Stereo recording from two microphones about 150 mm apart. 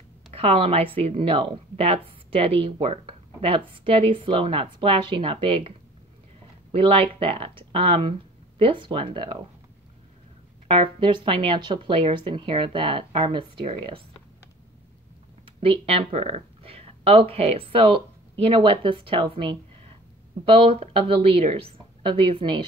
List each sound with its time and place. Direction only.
0.3 s speech: 40° right (ahead or behind)
6.7 s speech: 40° right (ahead or behind)
10.7 s speech: 35° right (ahead or behind)
15.4 s a woman's voice: 35° right (ahead or behind)